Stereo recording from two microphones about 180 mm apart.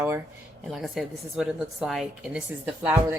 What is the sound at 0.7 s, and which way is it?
A woman's voice, centre (ahead or behind).